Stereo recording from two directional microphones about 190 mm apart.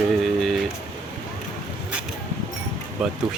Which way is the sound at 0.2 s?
Centre (ahead or behind).